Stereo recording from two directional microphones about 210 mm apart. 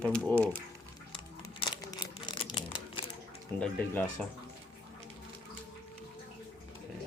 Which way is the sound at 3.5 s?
5° left (ahead or behind).